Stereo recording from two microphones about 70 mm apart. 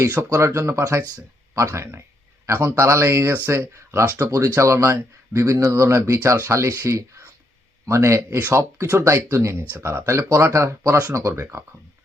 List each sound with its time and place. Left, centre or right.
0.1 s speech: right
4.2 s speech: right
4.4 s speech: right